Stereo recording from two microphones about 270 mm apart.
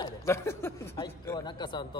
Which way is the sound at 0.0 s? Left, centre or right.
Centre.